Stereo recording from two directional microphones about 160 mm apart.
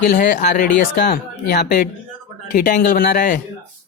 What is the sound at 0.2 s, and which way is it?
Speech, 50° left (ahead or behind).